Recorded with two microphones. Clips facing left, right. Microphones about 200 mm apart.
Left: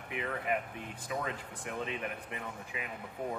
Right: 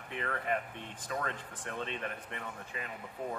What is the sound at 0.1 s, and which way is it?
Speech, 10° left (ahead or behind).